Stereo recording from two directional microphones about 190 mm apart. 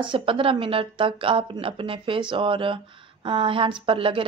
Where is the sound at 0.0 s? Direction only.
25° right (ahead or behind).